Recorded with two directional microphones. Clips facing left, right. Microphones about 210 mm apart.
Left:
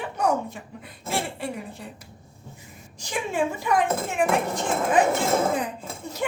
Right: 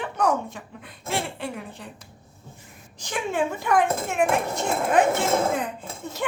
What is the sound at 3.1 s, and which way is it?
A woman's voice, centre (ahead or behind).